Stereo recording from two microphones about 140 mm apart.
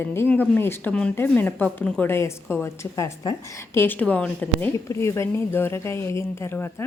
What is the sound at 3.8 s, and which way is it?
A woman's voice, 15° left (ahead or behind).